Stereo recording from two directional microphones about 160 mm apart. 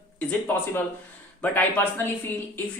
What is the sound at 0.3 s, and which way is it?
Speech, 10° left (ahead or behind).